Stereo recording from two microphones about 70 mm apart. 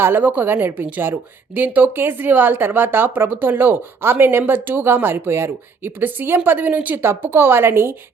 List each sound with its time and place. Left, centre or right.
0.0 s a woman's voice: right